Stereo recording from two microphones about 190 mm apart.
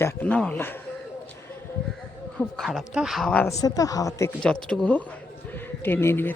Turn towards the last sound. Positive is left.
turn(degrees=10)  # may be behind; listen again after turning